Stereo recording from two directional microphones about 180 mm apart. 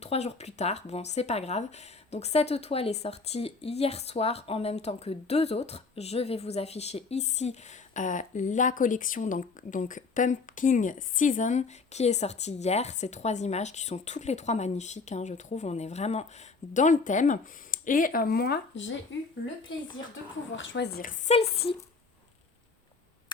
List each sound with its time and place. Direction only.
0.0 s speech: 35° left (ahead or behind); by 18.9 s 90° left
20.6 s speech: 70° left (ahead or behind)
21.0 s speech: 45° left (ahead or behind)
21.3 s speech: 35° left (ahead or behind)